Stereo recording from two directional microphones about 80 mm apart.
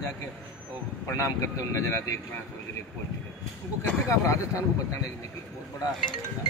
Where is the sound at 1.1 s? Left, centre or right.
Left.